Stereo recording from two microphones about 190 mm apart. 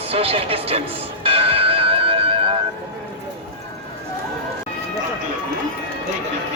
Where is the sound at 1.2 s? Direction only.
30° right (ahead or behind).